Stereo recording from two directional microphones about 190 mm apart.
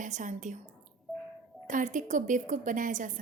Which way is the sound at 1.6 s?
40° right (ahead or behind).